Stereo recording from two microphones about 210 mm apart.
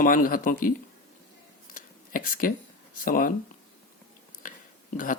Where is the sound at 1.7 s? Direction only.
40° left (ahead or behind).